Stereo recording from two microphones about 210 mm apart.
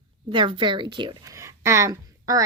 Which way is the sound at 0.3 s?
25° right (ahead or behind).